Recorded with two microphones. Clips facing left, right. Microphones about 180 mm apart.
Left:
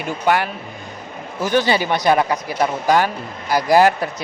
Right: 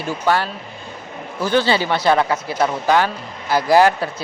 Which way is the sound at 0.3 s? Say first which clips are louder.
Left 1 dB; 15° left (ahead or behind).